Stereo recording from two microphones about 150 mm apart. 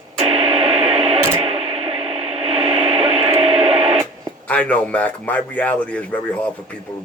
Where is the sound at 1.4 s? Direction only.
45° right (ahead or behind).